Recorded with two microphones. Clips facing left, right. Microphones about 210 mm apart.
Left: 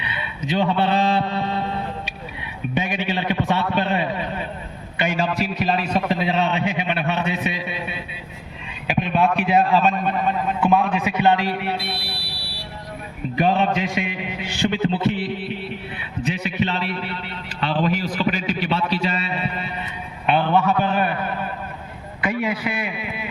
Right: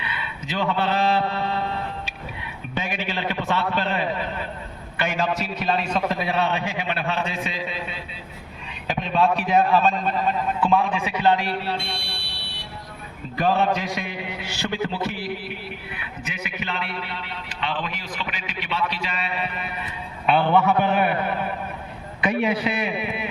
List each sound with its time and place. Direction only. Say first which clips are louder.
0.0 s speech: left 3 dB; 20° left (ahead or behind)
2.7 s a man's voice: left 4 dB; 20° left (ahead or behind)
4.9 s a sound: left 3 dB; 15° left (ahead or behind)
5.4 s a man's voice: left 3 dB; 5° left (ahead or behind)
6.1 s a man's voice: left 3 dB; 20° left (ahead or behind)
8.9 s a sound: left 2 dB; 5° left (ahead or behind)
9.5 s a man's voice: left 1 dB; 15° left (ahead or behind)
13.3 s a man's voice: left 2 dB; 20° left (ahead or behind)
17.6 s a sound: left 8 dB; 40° left (ahead or behind)
20.7 s a man's voice: even; 15° right (ahead or behind)